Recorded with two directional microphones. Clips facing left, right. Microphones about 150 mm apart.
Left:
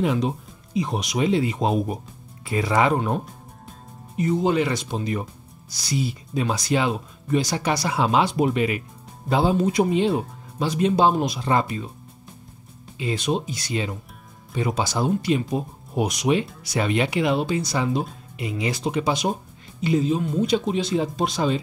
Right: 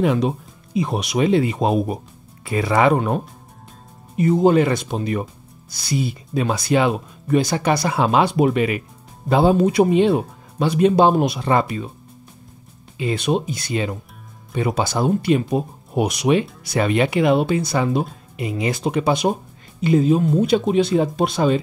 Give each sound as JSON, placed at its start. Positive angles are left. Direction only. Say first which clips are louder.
{"t": 0.0, "sound": "speech", "louder": "right 4 dB", "side_deg": -65}
{"t": 4.2, "sound": "speech", "louder": "right 6 dB", "side_deg": -50}
{"t": 13.0, "sound": "speech", "louder": "right 4 dB", "side_deg": -60}
{"t": 16.6, "sound": "speech", "louder": "right 4 dB", "side_deg": -55}